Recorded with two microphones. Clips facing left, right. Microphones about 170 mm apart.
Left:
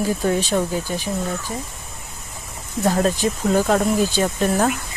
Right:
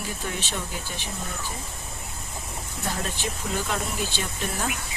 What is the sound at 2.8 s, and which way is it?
Speech, 40° left (ahead or behind).